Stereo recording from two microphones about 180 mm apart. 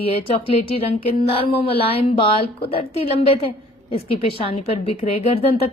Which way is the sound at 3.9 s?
30° left (ahead or behind).